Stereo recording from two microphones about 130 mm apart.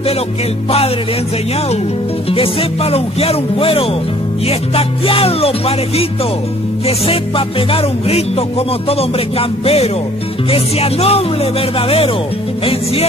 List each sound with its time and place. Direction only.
2.2 s music: 45° left (ahead or behind)